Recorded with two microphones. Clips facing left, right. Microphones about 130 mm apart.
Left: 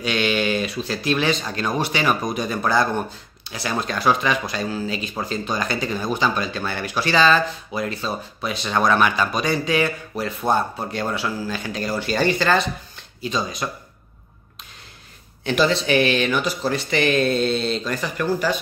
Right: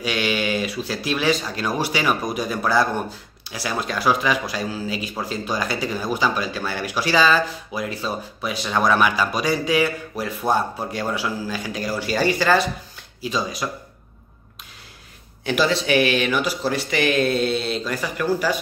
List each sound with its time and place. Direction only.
0.0 s a man's voice: 5° right (ahead or behind)
15.4 s a man's voice: 5° right (ahead or behind)